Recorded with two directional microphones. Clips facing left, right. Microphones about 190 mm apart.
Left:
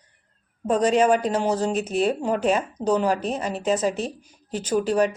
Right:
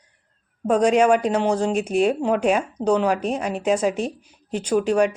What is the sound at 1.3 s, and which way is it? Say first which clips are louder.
Speech: right 2 dB; 5° left (ahead or behind).